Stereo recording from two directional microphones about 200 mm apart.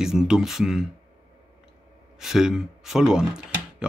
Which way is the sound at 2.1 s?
Centre (ahead or behind).